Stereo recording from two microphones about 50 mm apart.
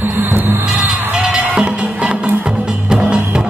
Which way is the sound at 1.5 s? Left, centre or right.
Right.